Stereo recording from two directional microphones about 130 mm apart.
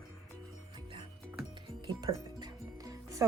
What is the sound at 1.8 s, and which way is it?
Music, 30° right (ahead or behind).